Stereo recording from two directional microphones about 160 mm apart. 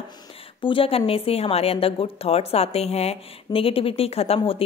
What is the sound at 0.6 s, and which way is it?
A woman's voice, 35° left (ahead or behind).